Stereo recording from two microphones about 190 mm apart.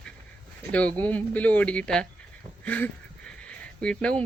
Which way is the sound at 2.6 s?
10° left (ahead or behind).